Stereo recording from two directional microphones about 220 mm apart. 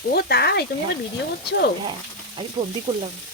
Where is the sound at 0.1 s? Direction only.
45° left (ahead or behind).